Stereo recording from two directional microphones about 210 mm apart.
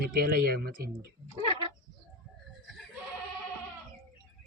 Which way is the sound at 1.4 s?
25° right (ahead or behind).